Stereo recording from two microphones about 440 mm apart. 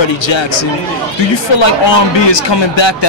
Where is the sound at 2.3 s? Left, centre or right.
Left.